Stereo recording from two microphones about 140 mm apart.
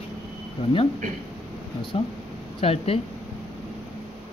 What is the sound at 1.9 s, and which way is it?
Speech, 45° left (ahead or behind).